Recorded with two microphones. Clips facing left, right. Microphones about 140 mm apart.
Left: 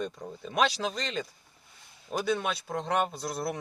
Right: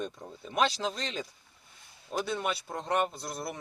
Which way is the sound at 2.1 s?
10° left (ahead or behind).